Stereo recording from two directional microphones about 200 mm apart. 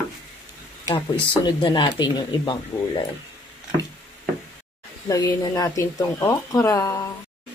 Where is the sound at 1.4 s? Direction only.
20° left (ahead or behind).